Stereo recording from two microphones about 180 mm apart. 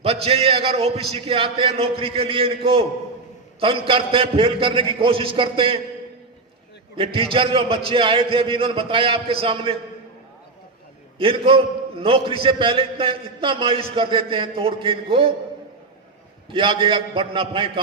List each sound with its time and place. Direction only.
0.0 s a man's voice: 35° right (ahead or behind)
6.9 s a man's voice: 30° right (ahead or behind)
11.2 s a man's voice: 30° right (ahead or behind)
16.5 s a man's voice: 30° right (ahead or behind)